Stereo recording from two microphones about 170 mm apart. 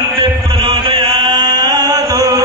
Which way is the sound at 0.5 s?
30° right (ahead or behind).